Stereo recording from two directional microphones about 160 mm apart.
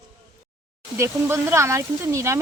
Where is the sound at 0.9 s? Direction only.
15° right (ahead or behind).